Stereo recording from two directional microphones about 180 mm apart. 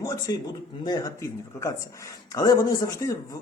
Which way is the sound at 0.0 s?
20° left (ahead or behind).